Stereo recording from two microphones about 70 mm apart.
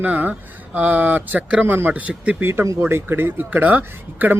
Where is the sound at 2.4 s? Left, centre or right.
Right.